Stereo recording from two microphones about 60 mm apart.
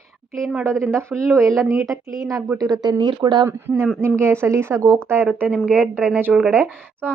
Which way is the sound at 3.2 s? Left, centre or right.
Right.